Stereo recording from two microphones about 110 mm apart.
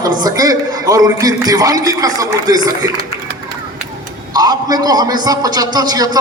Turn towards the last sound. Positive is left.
turn(degrees=-35)  # may be behind; listen again after turning